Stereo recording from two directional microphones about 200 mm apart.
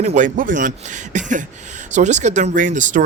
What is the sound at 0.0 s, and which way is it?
Speech, 40° right (ahead or behind).